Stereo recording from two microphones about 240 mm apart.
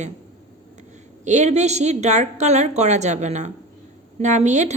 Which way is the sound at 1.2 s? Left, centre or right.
Right.